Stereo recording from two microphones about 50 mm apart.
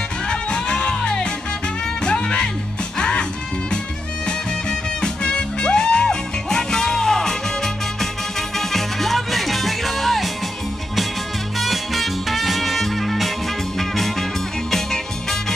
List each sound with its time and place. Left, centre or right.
0.3 s music: centre
4.3 s music: centre
11.5 s music: centre